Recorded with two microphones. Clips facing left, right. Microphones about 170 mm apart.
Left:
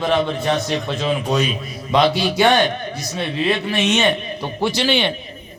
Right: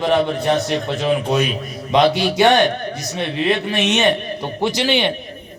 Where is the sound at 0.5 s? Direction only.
20° right (ahead or behind).